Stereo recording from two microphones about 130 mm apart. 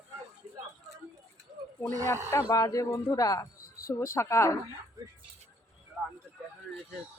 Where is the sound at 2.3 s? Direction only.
30° left (ahead or behind).